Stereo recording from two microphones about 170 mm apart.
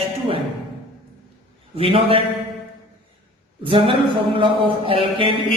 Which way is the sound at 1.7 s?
35° right (ahead or behind).